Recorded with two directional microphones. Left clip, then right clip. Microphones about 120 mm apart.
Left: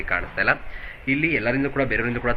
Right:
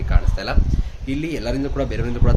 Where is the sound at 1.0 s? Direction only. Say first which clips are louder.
Left 4 dB; 45° right (ahead or behind).